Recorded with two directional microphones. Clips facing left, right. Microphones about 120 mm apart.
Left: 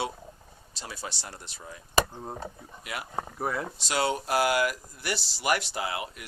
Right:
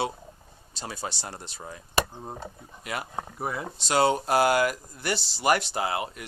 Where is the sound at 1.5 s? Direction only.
50° right (ahead or behind).